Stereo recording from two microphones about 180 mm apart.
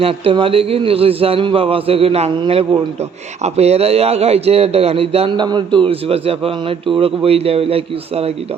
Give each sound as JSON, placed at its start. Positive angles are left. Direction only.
{"t": 0.0, "sound": "speech", "side_deg": -30}